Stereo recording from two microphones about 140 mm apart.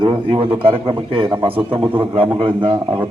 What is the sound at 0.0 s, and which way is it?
A man's voice, 40° right (ahead or behind).